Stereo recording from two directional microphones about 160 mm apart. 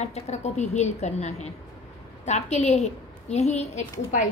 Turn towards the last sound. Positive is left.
turn(degrees=50)  # may be behind; listen again after turning